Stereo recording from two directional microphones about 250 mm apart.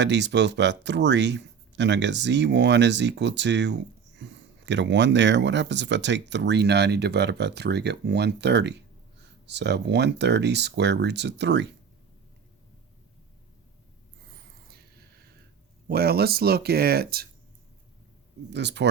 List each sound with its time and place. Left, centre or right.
0.0 s speech: right
15.9 s speech: right
18.5 s speech: right